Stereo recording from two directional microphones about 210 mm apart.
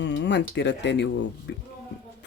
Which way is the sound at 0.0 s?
55° left (ahead or behind).